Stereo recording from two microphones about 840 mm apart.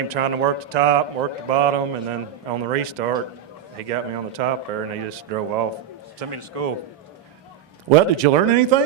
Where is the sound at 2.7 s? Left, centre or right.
Right.